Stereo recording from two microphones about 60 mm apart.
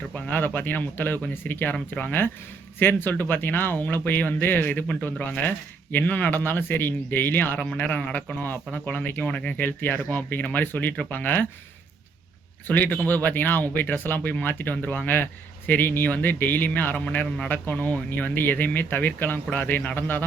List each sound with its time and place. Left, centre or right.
0.3 s speech: left
9.6 s speech: left
12.6 s speech: left